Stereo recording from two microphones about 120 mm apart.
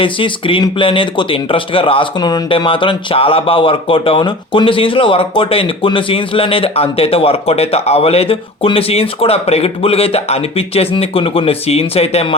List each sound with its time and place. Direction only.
0.0 s speech: 45° left (ahead or behind)